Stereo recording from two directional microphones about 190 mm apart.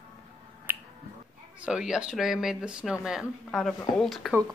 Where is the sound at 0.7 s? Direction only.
10° right (ahead or behind).